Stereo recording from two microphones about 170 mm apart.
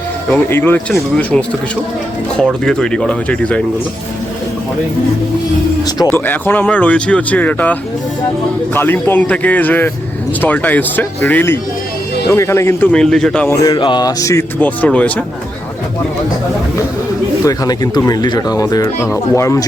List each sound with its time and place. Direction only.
0.3 s speech: 10° left (ahead or behind)
6.0 s speech: 15° left (ahead or behind)
13.5 s speech: 20° left (ahead or behind)
17.4 s speech: 20° left (ahead or behind)